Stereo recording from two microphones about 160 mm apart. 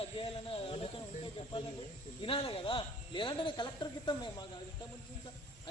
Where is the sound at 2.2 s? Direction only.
35° left (ahead or behind).